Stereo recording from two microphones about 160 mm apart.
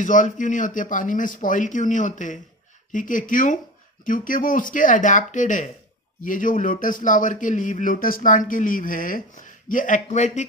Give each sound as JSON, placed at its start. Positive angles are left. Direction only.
{"t": 0.0, "sound": "speech", "side_deg": 55}